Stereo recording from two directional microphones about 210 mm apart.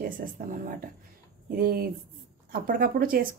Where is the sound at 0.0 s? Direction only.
40° right (ahead or behind).